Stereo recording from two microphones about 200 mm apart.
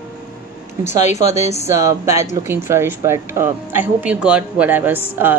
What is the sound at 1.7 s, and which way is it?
Speech, 15° right (ahead or behind).